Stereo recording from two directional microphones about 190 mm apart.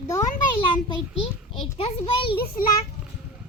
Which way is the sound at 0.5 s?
25° left (ahead or behind).